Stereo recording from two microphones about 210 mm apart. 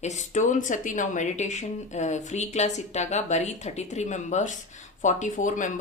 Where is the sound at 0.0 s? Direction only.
35° left (ahead or behind).